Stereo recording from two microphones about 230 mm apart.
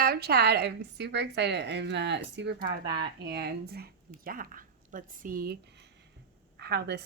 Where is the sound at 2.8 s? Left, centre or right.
Centre.